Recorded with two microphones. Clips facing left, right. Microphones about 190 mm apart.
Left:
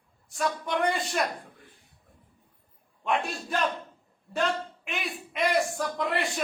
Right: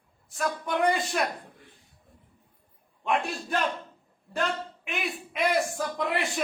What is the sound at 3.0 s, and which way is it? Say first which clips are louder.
A man's voice: right 1 dB; centre (ahead or behind).